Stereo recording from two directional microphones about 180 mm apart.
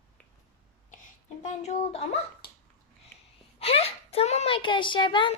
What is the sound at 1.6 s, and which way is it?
Speech, 35° left (ahead or behind).